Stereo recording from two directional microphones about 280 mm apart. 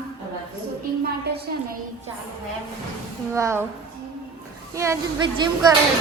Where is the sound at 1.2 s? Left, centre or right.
Right.